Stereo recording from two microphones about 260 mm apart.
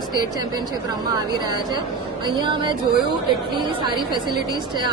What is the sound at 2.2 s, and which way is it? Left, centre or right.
Speech, centre.